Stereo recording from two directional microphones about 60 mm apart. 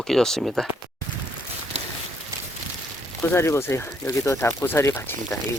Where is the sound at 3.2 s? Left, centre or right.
Left.